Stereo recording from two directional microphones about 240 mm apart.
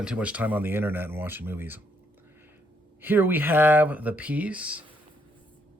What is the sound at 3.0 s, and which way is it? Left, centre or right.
Speech, centre.